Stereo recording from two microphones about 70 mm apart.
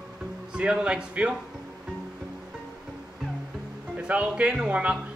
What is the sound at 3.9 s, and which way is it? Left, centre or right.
Speech, centre.